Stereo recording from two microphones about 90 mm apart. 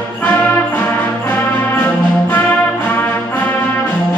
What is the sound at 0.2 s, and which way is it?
Brass instrument, 15° left (ahead or behind).